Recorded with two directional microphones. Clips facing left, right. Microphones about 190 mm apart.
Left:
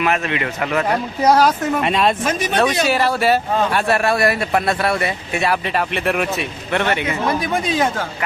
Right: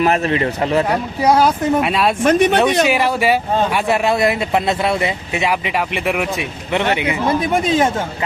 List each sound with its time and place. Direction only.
0.0 s speech: 35° right (ahead or behind)
0.9 s speech: centre (ahead or behind)
2.2 s speech: 65° right (ahead or behind)
2.8 s a man's voice: 15° right (ahead or behind)
7.3 s speech: 25° right (ahead or behind)